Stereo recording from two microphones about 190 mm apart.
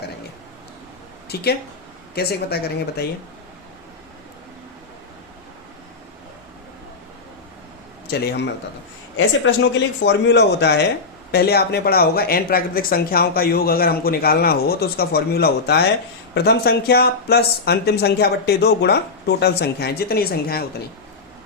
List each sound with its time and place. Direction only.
1.3 s speech: 60° left (ahead or behind)
8.0 s speech: 60° left (ahead or behind)
9.1 s speech: 85° left; by 20.8 s 55° left (ahead or behind)